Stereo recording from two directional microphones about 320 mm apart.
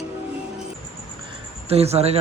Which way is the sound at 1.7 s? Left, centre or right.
Centre.